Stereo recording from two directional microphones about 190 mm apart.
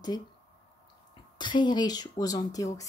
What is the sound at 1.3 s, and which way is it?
A woman's voice, 25° left (ahead or behind).